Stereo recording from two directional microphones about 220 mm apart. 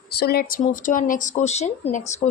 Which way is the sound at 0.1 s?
45° left (ahead or behind).